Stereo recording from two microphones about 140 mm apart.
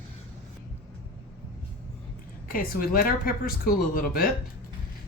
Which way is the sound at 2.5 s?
90° left.